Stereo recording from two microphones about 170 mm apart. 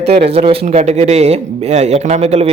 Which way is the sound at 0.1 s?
35° right (ahead or behind).